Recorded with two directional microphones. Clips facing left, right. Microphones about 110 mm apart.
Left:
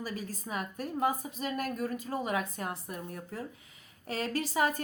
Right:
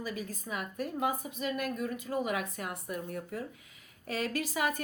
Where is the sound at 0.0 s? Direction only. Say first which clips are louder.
Even; 35° left (ahead or behind).